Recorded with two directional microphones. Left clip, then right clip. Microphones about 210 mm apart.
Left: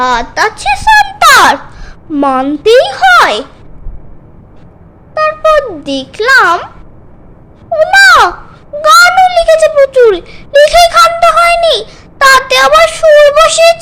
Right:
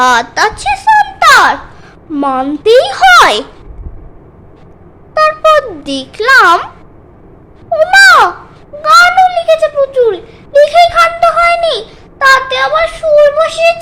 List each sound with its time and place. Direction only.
0.0 s a sound: centre (ahead or behind); by 1.9 s 20° left (ahead or behind)
2.0 s a woman's voice: 5° left (ahead or behind)
5.1 s a child's voice: centre (ahead or behind)
7.7 s a sound: centre (ahead or behind)
8.8 s a child's voice: 15° left (ahead or behind)
12.2 s a child's voice: 25° left (ahead or behind)